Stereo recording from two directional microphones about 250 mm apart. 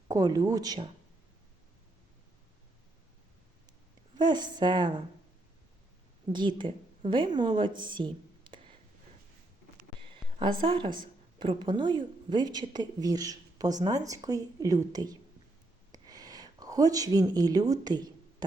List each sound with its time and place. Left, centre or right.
0.1 s a woman's voice: centre
4.2 s a woman's voice: centre
6.3 s a woman's voice: centre
10.0 s a woman's voice: centre
15.9 s a sound: centre